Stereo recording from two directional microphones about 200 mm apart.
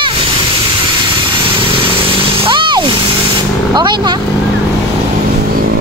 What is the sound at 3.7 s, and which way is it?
Speech, 20° right (ahead or behind).